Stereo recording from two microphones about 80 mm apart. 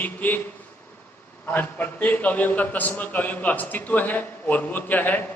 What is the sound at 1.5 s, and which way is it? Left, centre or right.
A man's voice, left.